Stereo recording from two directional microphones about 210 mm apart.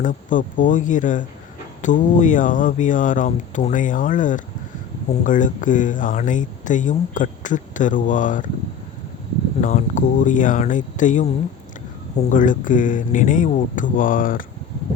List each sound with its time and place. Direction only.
0.0 s speech: 40° left (ahead or behind)
9.6 s speech: 35° left (ahead or behind)